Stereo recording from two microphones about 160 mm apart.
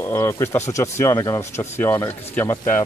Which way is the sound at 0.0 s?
15° left (ahead or behind).